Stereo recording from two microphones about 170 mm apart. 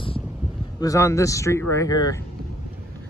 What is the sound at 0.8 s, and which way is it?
Speech, 20° left (ahead or behind).